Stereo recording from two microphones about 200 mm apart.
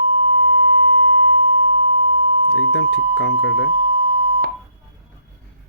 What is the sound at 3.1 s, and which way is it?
Speech, 65° left (ahead or behind).